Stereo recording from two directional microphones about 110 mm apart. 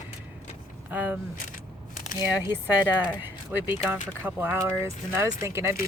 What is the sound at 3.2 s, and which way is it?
Speech, 20° right (ahead or behind).